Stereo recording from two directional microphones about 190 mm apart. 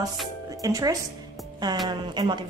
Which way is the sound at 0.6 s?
20° right (ahead or behind).